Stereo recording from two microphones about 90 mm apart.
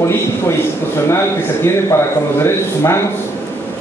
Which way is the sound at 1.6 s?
30° left (ahead or behind).